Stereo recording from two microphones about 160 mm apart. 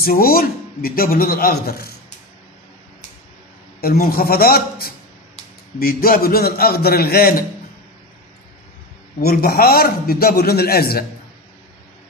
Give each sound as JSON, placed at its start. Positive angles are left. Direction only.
{"t": 0.0, "sound": "a man's voice", "side_deg": 65}
{"t": 3.8, "sound": "a man's voice", "side_deg": 70}
{"t": 9.2, "sound": "a man's voice", "side_deg": 70}